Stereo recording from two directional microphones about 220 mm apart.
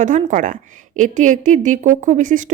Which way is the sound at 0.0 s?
35° right (ahead or behind).